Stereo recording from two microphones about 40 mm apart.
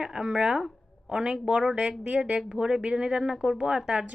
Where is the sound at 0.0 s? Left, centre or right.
Centre.